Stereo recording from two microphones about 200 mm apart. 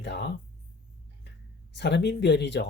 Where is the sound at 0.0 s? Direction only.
60° left (ahead or behind).